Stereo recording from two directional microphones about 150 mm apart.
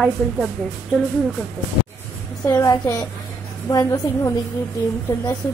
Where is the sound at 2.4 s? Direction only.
25° left (ahead or behind).